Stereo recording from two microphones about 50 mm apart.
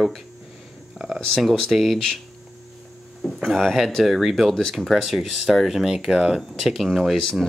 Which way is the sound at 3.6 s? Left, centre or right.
Centre.